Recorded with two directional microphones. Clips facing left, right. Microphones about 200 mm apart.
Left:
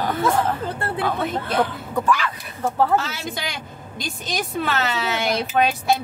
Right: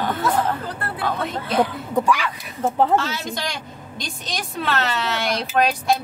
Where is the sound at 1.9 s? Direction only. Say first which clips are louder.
Right 1 dB; 15° right (ahead or behind).